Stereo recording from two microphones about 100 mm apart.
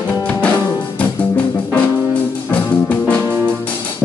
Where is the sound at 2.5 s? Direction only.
15° left (ahead or behind).